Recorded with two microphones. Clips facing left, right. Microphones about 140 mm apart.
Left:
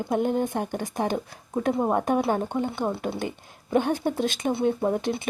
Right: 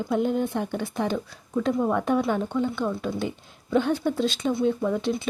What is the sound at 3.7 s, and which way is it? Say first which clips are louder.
Speech: even; 50° left (ahead or behind).